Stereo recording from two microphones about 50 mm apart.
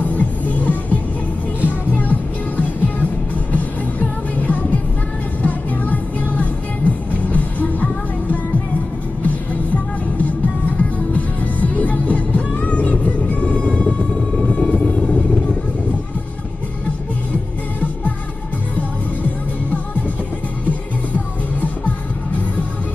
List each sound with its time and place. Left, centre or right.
0.0 s music: left
10.8 s music: left
14.5 s vehicle: left